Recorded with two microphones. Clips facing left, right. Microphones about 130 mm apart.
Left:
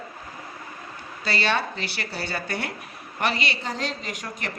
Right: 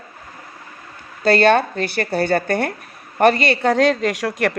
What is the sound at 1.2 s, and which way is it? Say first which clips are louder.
A woman's voice: right 12 dB; 50° right (ahead or behind).